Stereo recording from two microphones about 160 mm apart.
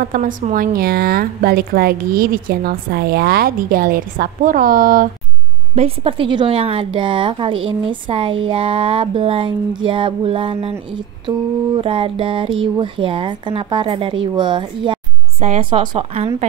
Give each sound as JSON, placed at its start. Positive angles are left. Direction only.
{"t": 0.0, "sound": "speech", "side_deg": -55}
{"t": 5.8, "sound": "a woman's voice", "side_deg": -35}
{"t": 15.4, "sound": "a woman's voice", "side_deg": -45}
{"t": 15.8, "sound": "a woman's voice", "side_deg": -30}